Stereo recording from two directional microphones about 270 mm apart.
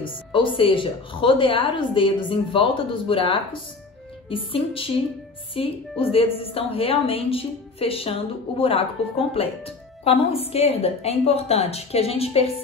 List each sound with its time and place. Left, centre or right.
0.0 s a woman's voice: centre